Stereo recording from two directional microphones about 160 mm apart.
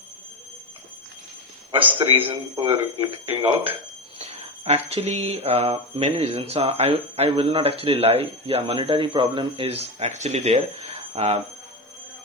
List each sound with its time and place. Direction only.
2.3 s speech: 30° right (ahead or behind)
3.2 s speech: 10° right (ahead or behind)
4.2 s speech: 40° right (ahead or behind)